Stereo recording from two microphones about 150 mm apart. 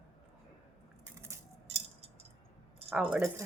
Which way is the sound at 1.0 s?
15° right (ahead or behind).